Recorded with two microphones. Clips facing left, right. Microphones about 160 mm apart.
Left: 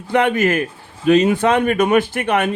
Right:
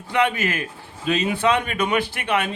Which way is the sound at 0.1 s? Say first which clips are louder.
Left 6 dB; 50° left (ahead or behind).